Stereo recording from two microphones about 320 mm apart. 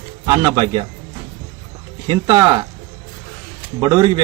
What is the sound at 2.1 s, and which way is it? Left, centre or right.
Speech, centre.